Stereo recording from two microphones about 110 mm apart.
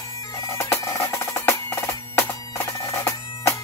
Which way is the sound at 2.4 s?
30° left (ahead or behind).